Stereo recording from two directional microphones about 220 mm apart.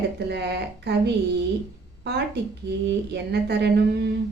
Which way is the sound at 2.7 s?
50° right (ahead or behind).